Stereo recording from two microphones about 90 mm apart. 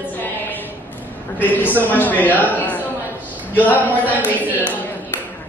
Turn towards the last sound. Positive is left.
turn(degrees=-20)  # may be behind; listen again after turning